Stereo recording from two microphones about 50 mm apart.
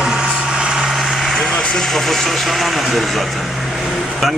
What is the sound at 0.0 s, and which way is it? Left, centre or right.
Vehicle, centre.